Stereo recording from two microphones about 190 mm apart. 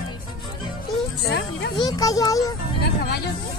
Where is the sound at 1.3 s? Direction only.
60° left (ahead or behind).